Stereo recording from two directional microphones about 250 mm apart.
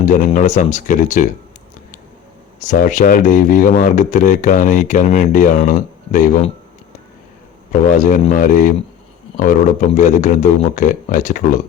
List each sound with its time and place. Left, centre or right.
0.0 s speech: left
2.6 s speech: left
7.7 s speech: left